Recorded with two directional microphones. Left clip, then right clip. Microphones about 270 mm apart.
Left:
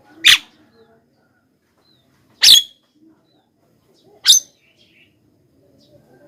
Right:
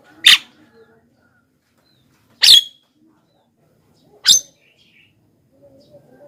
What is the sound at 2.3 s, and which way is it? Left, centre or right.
Dog, centre.